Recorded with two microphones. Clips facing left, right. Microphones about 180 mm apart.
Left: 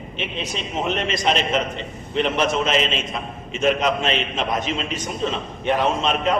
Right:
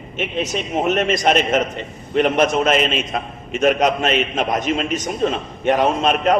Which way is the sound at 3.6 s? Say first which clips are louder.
Right 3 dB; 45° right (ahead or behind).